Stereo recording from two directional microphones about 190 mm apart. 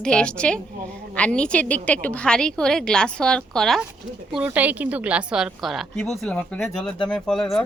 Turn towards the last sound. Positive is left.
turn(degrees=0)  # may be behind; listen again after turning